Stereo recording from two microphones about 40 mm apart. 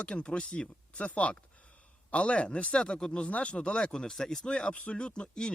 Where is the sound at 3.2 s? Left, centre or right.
Left.